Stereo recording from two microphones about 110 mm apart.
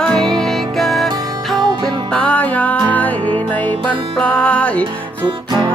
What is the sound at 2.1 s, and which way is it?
Music, 10° left (ahead or behind).